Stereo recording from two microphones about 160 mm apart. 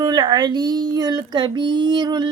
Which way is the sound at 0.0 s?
25° right (ahead or behind).